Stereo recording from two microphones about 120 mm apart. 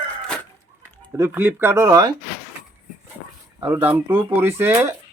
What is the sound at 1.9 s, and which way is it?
Speech, 35° right (ahead or behind).